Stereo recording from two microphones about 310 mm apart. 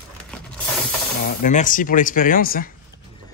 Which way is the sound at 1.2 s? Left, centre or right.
Left.